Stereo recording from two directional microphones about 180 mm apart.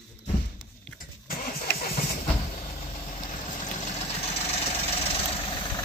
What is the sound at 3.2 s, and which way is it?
Vehicle, 45° left (ahead or behind).